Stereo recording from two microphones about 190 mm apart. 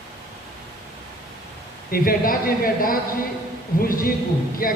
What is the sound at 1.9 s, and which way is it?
Speech, 50° left (ahead or behind).